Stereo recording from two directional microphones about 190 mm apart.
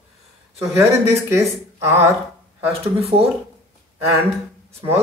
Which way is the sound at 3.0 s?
30° right (ahead or behind).